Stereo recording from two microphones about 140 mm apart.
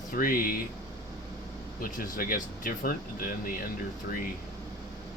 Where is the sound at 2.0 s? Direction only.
90° left.